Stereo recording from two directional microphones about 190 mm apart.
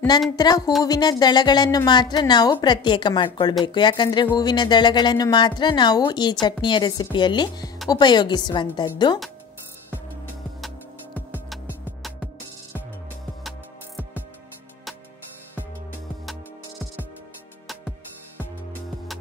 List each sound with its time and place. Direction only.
0.4 s a woman's voice: 20° left (ahead or behind)
11.3 s music: 5° right (ahead or behind)